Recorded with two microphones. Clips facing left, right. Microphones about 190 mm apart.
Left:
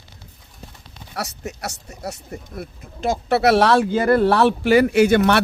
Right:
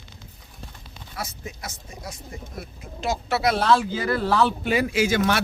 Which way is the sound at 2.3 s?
50° left (ahead or behind).